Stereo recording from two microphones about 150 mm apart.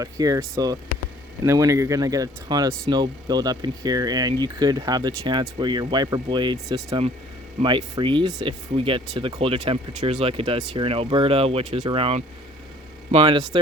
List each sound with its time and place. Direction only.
0.0 s speech: 25° right (ahead or behind)